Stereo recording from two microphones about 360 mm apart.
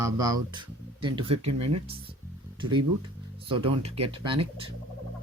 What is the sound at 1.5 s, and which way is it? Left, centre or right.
Speech, right.